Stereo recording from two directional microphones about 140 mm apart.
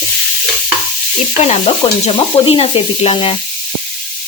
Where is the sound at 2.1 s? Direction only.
40° left (ahead or behind).